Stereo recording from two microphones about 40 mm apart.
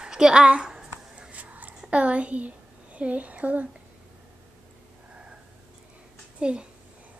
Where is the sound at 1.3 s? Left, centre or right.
Right.